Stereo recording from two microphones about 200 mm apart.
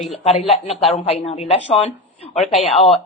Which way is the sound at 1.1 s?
30° left (ahead or behind).